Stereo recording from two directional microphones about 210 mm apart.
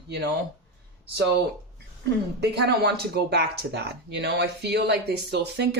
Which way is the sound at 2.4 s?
50° right (ahead or behind).